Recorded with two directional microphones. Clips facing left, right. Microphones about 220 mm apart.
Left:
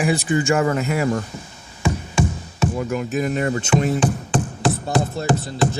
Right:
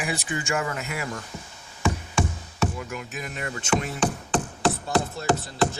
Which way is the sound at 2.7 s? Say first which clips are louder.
Left 11 dB; 40° left (ahead or behind).